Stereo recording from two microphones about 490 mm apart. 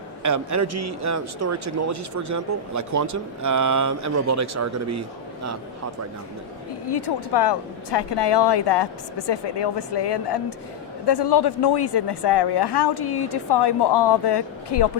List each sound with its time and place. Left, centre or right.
0.2 s a man's voice: right
6.9 s a woman's voice: left